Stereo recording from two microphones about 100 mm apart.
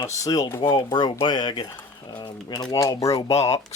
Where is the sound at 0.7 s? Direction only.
50° left (ahead or behind).